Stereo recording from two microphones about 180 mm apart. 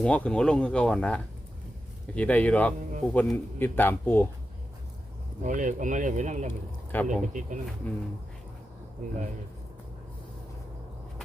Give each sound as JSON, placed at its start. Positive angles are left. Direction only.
{"t": 0.0, "sound": "speech", "side_deg": 5}
{"t": 5.4, "sound": "speech", "side_deg": -45}
{"t": 6.9, "sound": "speech", "side_deg": 10}